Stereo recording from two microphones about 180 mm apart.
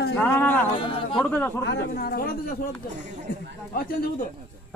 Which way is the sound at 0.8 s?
30° left (ahead or behind).